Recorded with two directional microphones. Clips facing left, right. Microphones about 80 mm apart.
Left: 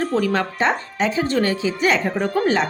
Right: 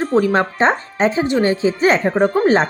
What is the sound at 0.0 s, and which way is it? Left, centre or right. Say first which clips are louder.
Speech: right 5 dB; right.